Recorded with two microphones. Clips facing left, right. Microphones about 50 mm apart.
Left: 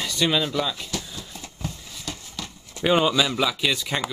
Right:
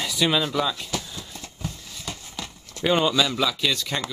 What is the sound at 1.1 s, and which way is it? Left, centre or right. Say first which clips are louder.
Horse: even; centre.